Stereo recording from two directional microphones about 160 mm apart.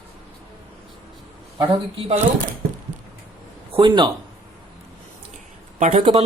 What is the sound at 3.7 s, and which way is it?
Speech, 30° right (ahead or behind).